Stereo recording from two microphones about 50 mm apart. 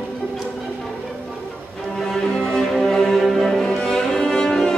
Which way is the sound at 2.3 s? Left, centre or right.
Centre.